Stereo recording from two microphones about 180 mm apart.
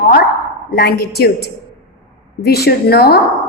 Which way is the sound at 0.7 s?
60° left (ahead or behind).